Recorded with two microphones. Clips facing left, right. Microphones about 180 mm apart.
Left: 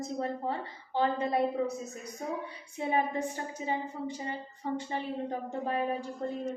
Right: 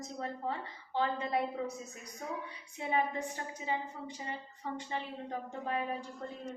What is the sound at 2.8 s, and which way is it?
A woman's voice, 40° left (ahead or behind).